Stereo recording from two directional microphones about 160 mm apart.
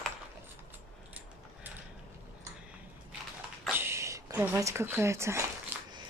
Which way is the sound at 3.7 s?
15° right (ahead or behind).